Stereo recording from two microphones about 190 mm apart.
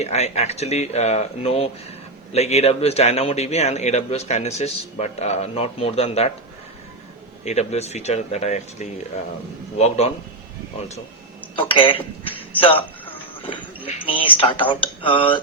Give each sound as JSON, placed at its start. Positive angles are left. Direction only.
{"t": 0.0, "sound": "a man's voice", "side_deg": 35}
{"t": 7.4, "sound": "a man's voice", "side_deg": 35}
{"t": 11.5, "sound": "a man's voice", "side_deg": 25}
{"t": 13.9, "sound": "speech", "side_deg": 30}